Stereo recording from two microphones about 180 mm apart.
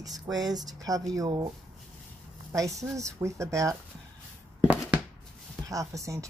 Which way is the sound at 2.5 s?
15° right (ahead or behind).